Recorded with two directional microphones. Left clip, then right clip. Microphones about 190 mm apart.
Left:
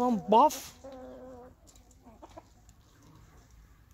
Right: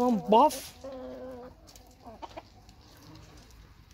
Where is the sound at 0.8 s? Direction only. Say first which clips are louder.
Right 5 dB; 30° right (ahead or behind).